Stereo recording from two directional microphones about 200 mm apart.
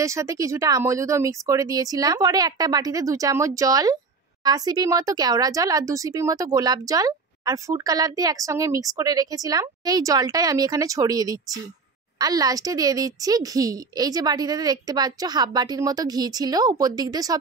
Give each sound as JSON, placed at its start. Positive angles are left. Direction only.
{"t": 0.0, "sound": "a woman's voice", "side_deg": -15}